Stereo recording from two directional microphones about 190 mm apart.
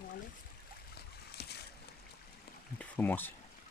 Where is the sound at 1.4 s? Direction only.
60° left (ahead or behind).